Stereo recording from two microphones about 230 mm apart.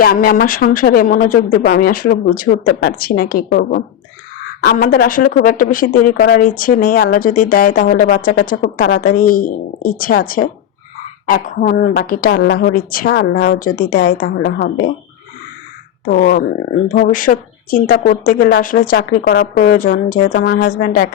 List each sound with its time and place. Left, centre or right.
0.0 s speech: left
16.0 s speech: left